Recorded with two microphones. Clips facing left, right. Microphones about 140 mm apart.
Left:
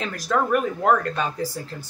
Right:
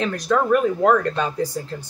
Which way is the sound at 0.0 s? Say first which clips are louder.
Right 3 dB; 5° left (ahead or behind).